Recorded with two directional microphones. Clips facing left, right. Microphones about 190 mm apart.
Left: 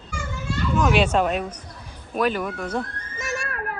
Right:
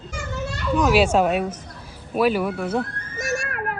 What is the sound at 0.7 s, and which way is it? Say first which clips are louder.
A woman's voice: right 3 dB; 5° right (ahead or behind).